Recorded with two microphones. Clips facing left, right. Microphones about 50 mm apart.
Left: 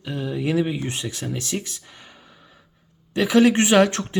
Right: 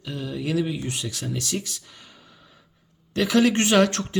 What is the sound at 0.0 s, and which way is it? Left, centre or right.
Speech, left.